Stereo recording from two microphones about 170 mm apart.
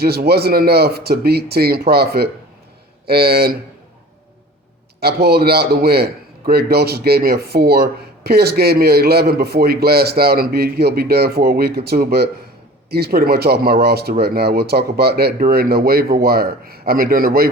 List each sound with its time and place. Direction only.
0.0 s a man's voice: 65° right (ahead or behind)
4.9 s a man's voice: 70° right (ahead or behind)